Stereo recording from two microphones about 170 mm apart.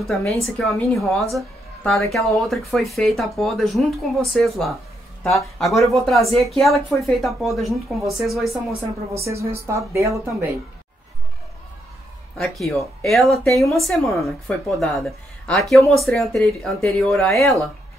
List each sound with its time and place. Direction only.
0.3 s speech: centre (ahead or behind)
9.1 s a woman's voice: 15° right (ahead or behind)
12.4 s speech: centre (ahead or behind)